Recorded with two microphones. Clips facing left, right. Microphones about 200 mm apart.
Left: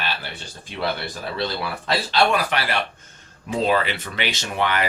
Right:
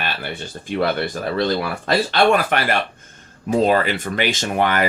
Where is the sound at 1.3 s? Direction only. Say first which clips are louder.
Right 6 dB; 50° right (ahead or behind).